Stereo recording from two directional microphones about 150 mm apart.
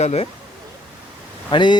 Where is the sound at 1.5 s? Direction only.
30° left (ahead or behind).